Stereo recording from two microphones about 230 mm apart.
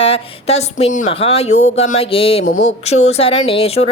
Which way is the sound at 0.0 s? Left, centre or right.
Left.